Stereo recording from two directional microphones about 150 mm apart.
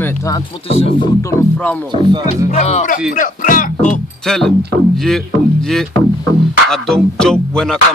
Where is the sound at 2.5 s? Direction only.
50° left (ahead or behind).